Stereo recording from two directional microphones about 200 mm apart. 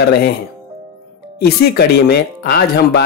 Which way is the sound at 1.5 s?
50° left (ahead or behind).